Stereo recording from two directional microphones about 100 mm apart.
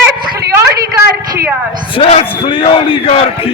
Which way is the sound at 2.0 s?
75° left (ahead or behind).